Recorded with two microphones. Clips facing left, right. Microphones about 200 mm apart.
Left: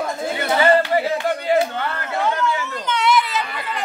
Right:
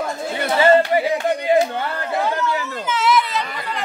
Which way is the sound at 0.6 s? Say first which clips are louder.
Right 2 dB; 25° right (ahead or behind).